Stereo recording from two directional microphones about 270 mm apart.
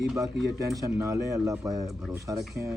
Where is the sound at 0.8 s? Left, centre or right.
Centre.